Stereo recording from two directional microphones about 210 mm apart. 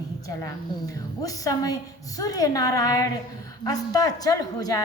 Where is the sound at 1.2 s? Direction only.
15° left (ahead or behind).